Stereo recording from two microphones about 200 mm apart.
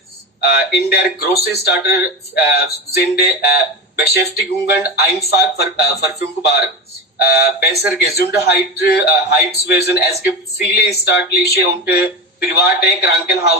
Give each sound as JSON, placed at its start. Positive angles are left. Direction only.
{"t": 0.4, "sound": "speech", "side_deg": 55}
{"t": 4.6, "sound": "speech", "side_deg": 50}